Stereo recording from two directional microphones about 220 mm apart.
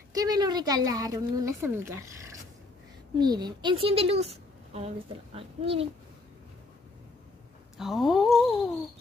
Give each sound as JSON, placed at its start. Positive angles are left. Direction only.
{"t": 0.1, "sound": "speech", "side_deg": -15}
{"t": 3.2, "sound": "a woman's voice", "side_deg": -20}
{"t": 7.7, "sound": "speech", "side_deg": 0}